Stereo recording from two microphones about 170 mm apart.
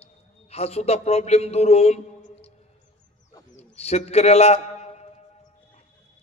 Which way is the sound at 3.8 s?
40° left (ahead or behind).